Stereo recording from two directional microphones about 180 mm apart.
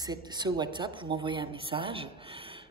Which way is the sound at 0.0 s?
25° right (ahead or behind).